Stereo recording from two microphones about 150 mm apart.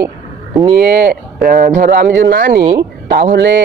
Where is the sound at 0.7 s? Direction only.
90° right; by 2.6 s 70° right (ahead or behind).